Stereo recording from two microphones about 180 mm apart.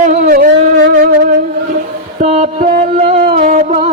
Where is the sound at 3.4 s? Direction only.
35° right (ahead or behind).